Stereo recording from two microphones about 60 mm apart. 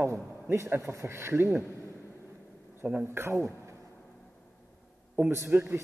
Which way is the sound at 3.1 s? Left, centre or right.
Right.